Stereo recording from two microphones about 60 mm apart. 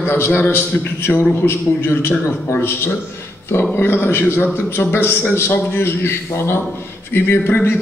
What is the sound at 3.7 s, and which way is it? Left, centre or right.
A man's voice, left.